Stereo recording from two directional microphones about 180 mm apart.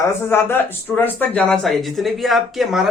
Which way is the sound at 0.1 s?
15° left (ahead or behind).